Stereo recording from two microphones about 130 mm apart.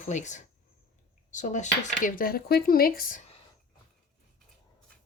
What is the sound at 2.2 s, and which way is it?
Speech, 90° left.